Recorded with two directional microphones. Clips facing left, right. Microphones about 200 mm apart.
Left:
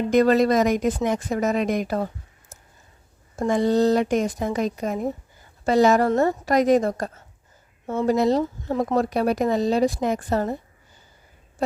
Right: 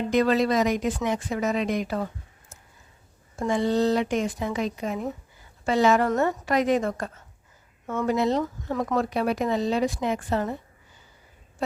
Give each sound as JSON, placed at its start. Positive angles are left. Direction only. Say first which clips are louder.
{"t": 0.1, "sound": "speech", "louder": "left 4 dB", "side_deg": 45}
{"t": 3.3, "sound": "speech", "louder": "left 4 dB", "side_deg": 40}